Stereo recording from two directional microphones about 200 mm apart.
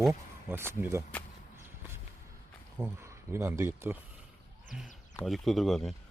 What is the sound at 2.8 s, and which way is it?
Speech, 15° right (ahead or behind).